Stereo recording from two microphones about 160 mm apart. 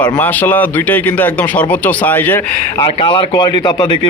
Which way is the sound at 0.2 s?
10° left (ahead or behind).